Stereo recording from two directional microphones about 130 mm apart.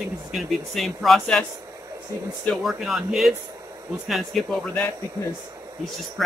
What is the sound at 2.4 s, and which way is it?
Speech, centre (ahead or behind).